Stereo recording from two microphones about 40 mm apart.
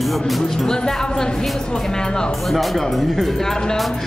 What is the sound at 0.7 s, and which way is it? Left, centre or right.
A man's voice, centre.